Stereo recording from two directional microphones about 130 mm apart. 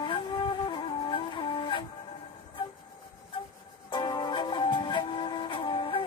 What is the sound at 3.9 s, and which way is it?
Music, 35° left (ahead or behind).